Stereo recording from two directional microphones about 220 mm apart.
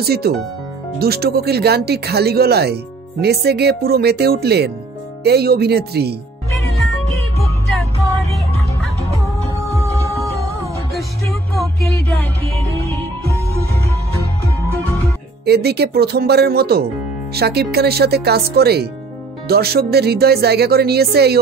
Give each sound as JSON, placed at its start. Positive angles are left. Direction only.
{"t": 0.0, "sound": "speech", "side_deg": -45}
{"t": 15.4, "sound": "speech", "side_deg": -45}